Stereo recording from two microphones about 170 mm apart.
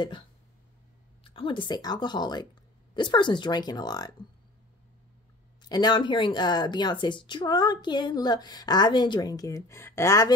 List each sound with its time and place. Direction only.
1.2 s speech: 30° left (ahead or behind)
5.6 s speech: 25° left (ahead or behind)